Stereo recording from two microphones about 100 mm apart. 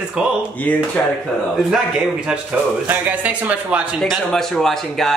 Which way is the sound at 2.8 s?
20° right (ahead or behind).